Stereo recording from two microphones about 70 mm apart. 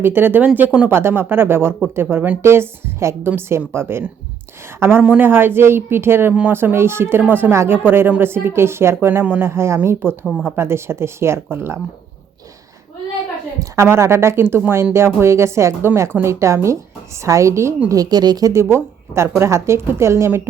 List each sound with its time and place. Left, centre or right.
0.0 s speech: right
0.9 s a woman's voice: right
9.2 s speech: right
9.5 s a woman's voice: right
10.1 s speech: centre
10.5 s a woman's voice: right
13.8 s a woman's voice: right
17.8 s speech: right
18.5 s a woman's voice: right